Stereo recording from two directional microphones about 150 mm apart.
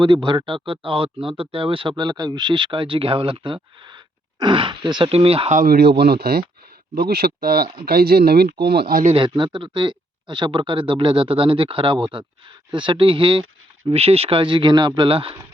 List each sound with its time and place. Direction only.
0.0 s speech: 30° right (ahead or behind)
5.5 s a man's voice: 85° right
9.0 s speech: 35° right (ahead or behind)